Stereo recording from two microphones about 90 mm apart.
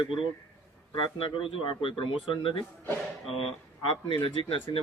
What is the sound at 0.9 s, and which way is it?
A man's voice, 70° left (ahead or behind).